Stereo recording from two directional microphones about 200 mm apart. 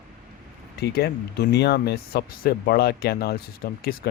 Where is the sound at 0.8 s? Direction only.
55° left (ahead or behind).